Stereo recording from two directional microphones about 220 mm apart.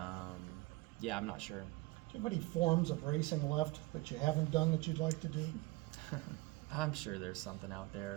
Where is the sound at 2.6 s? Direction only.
20° left (ahead or behind).